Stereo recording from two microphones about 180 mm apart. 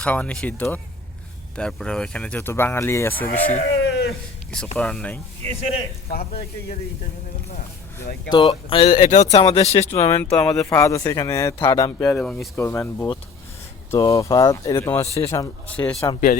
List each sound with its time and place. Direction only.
0.0 s speech: 5° left (ahead or behind)
3.8 s a sound: 70° left (ahead or behind)
4.8 s speech: 5° left (ahead or behind)
5.7 s speech: 60° left (ahead or behind)
8.3 s speech: 25° left (ahead or behind)
8.9 s speech: 45° left (ahead or behind)
9.9 s speech: 15° left (ahead or behind)
12.1 s speech: 5° left (ahead or behind)